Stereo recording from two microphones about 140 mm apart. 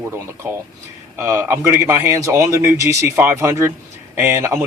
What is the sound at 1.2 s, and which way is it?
A man's voice, 20° right (ahead or behind).